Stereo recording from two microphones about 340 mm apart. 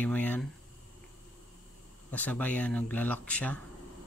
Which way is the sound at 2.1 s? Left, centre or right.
Centre.